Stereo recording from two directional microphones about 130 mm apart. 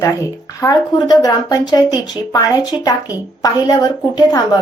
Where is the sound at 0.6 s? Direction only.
30° left (ahead or behind).